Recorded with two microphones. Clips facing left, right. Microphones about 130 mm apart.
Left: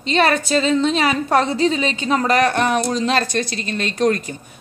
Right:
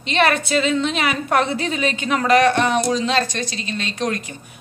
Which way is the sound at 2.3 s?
45° left (ahead or behind).